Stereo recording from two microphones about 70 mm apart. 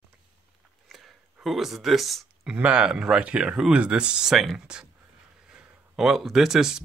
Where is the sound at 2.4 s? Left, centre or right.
Centre.